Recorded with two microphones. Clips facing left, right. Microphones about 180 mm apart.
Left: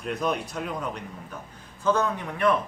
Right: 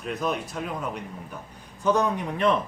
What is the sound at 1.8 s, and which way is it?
Speech, 15° right (ahead or behind).